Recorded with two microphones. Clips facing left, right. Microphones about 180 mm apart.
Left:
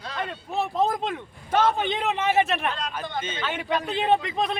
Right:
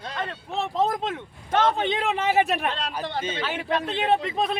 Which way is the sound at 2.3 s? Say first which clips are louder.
Right 1 dB; 10° right (ahead or behind).